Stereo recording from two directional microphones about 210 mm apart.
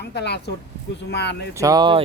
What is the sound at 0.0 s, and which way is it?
Speech, 50° left (ahead or behind).